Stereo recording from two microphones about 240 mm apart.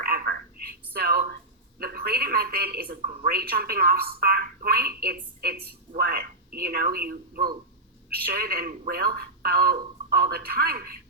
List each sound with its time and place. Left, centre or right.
0.0 s telephone: right
1.8 s a woman's voice: right